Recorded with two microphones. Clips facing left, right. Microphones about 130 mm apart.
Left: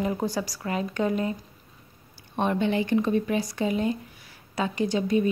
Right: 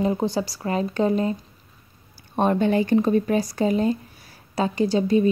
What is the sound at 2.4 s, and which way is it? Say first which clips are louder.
A woman's voice: right 5 dB; 45° right (ahead or behind).